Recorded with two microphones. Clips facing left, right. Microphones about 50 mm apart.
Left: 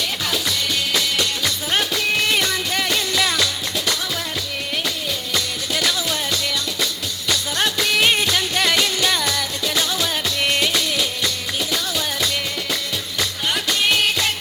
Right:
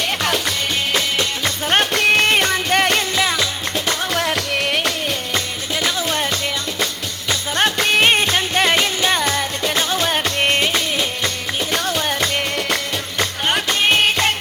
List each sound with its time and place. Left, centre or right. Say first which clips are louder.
0.9 s music: right 2 dB; right
3.2 s music: right 1 dB; right
4.1 s music: right 7 dB; right
5.8 s music: right 4 dB; right